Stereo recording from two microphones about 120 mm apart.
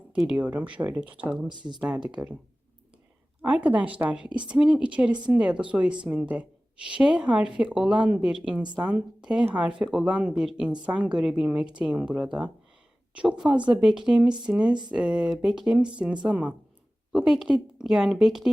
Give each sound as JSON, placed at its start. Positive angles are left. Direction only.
{"t": 0.3, "sound": "a woman's voice", "side_deg": -15}
{"t": 1.5, "sound": "speech", "side_deg": -40}
{"t": 2.0, "sound": "a woman's voice", "side_deg": -10}
{"t": 3.4, "sound": "a woman's voice", "side_deg": -15}